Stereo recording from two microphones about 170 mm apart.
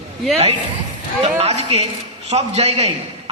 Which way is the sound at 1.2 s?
40° right (ahead or behind).